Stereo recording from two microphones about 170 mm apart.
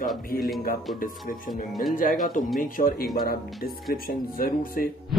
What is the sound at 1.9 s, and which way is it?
Speech, 55° left (ahead or behind).